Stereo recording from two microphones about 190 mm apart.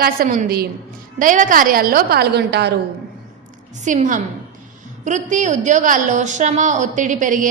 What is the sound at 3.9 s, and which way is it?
A woman's voice, 40° right (ahead or behind).